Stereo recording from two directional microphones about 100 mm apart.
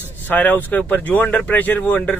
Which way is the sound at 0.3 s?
15° left (ahead or behind).